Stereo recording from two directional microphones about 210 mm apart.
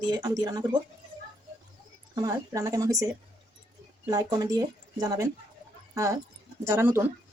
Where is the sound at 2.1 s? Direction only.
15° right (ahead or behind).